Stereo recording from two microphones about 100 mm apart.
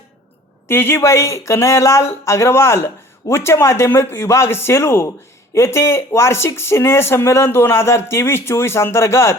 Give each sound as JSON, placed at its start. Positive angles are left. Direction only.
{"t": 0.7, "sound": "speech", "side_deg": 25}